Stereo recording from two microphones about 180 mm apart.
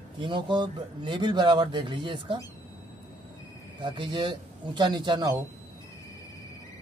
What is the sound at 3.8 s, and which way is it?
A man's voice, 25° right (ahead or behind).